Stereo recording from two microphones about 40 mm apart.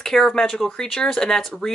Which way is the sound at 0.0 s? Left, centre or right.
Centre.